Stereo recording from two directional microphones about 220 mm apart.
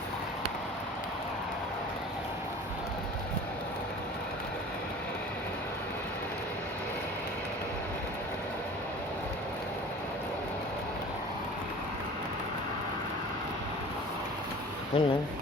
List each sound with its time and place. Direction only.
14.9 s speech: 20° left (ahead or behind)